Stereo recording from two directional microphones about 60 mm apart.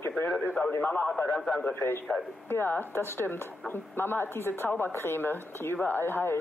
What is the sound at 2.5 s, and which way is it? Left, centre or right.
A woman's voice, left.